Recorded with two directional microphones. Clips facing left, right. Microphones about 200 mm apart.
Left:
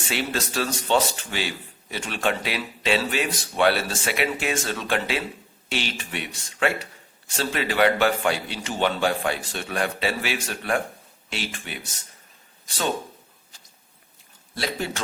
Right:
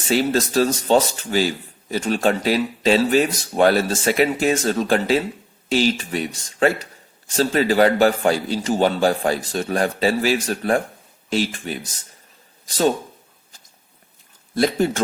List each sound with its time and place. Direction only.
0.0 s a man's voice: 40° right (ahead or behind)
14.5 s speech: 45° right (ahead or behind)